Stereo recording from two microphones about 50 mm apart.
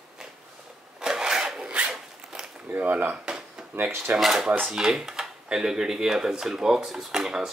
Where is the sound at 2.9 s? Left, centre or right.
Right.